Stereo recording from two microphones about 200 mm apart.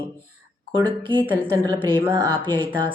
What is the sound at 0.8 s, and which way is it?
Speech, 25° right (ahead or behind).